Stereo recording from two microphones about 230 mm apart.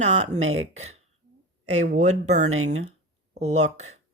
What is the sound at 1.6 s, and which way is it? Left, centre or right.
Speech, right.